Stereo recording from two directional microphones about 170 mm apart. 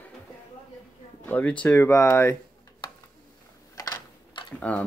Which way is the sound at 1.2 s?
10° left (ahead or behind).